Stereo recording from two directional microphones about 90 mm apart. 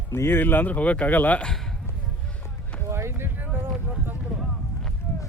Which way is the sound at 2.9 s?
30° right (ahead or behind).